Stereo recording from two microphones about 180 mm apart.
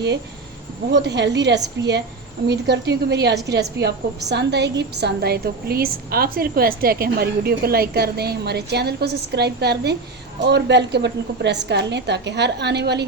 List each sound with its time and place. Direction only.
0.9 s a woman's voice: 70° right (ahead or behind)